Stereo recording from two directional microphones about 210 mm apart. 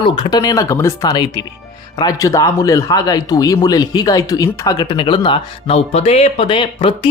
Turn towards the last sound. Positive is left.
turn(degrees=25)  # may be behind; listen again after turning